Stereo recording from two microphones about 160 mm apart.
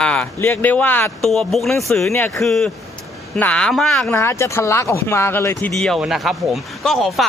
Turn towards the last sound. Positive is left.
turn(degrees=0)  # may be behind; listen again after turning